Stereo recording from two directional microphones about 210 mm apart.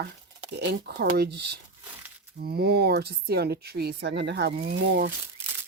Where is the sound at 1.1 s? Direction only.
50° right (ahead or behind).